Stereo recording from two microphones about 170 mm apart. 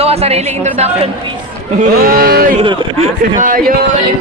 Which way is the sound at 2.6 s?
30° right (ahead or behind).